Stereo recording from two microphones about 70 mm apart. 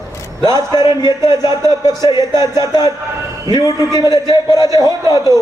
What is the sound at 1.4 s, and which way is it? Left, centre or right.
Speech, right.